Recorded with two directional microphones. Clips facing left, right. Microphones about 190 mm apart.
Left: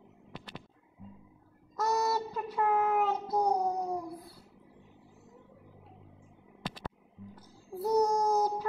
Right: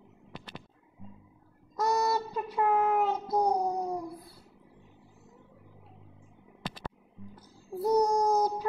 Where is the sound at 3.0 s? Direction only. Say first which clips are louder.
Right 2 dB; 15° right (ahead or behind).